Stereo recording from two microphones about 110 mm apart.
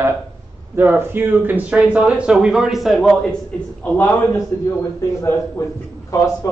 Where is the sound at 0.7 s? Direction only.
20° right (ahead or behind); by 3.3 s centre (ahead or behind).